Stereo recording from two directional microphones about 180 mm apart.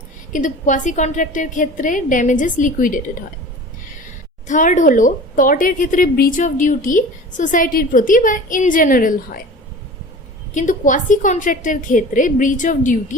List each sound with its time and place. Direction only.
0.3 s a woman's voice: 45° left (ahead or behind)
4.4 s a woman's voice: 45° left (ahead or behind)
10.5 s a woman's voice: 45° left (ahead or behind)